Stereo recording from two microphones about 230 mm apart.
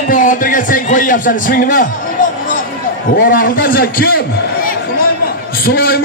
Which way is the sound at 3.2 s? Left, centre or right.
Left.